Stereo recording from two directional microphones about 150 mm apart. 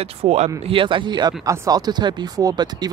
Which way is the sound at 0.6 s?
35° right (ahead or behind).